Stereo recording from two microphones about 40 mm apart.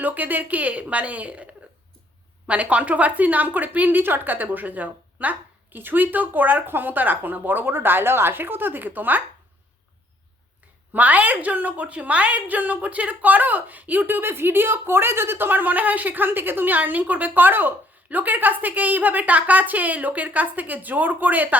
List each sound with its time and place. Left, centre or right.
0.0 s a woman's voice: right
6.7 s a woman's voice: right
10.9 s a woman's voice: right
14.2 s a woman's voice: right